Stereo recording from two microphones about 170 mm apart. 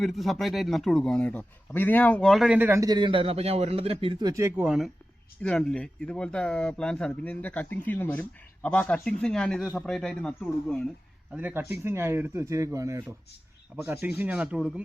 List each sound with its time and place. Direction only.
0.0 s a man's voice: centre (ahead or behind)
11.3 s speech: 10° right (ahead or behind)